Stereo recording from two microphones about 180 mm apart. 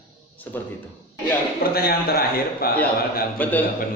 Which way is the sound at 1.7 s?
60° left (ahead or behind).